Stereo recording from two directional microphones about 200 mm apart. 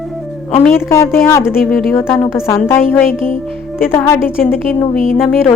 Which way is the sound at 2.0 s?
10° left (ahead or behind).